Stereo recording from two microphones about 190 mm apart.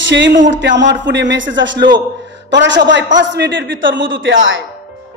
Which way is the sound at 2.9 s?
70° right (ahead or behind).